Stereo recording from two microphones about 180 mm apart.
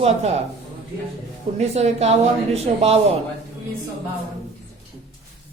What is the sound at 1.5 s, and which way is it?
Speech, 35° right (ahead or behind).